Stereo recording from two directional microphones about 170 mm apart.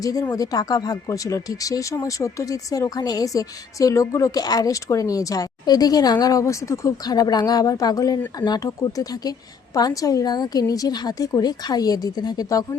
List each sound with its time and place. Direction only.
0.0 s speech: 20° left (ahead or behind)